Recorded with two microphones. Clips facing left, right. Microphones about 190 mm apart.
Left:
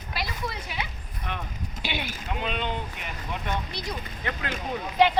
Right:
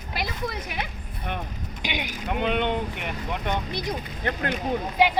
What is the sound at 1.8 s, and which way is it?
Speech, 15° right (ahead or behind).